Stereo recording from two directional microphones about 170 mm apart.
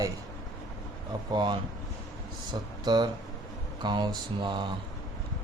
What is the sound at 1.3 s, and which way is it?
Speech, 25° right (ahead or behind).